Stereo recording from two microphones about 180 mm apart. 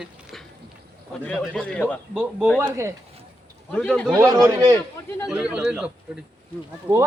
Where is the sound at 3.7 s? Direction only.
5° left (ahead or behind).